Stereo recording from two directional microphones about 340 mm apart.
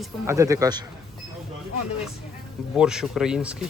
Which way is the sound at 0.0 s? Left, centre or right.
Centre.